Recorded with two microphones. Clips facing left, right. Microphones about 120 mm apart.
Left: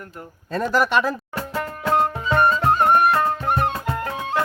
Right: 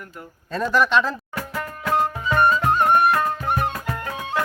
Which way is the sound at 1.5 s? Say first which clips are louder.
Left 2 dB; 25° left (ahead or behind).